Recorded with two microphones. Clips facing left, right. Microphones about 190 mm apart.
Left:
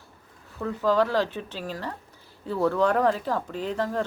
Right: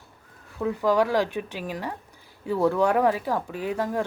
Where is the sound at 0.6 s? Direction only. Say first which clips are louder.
Right 1 dB; 10° right (ahead or behind).